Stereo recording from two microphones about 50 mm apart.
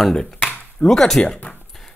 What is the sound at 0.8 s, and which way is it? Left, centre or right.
Speech, centre.